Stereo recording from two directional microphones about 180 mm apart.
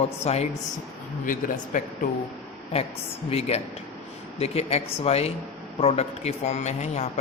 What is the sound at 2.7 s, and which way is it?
A man's voice, 35° left (ahead or behind).